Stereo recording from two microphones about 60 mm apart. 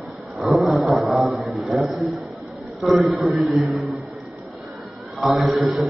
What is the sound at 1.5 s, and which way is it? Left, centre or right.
A man's voice, centre.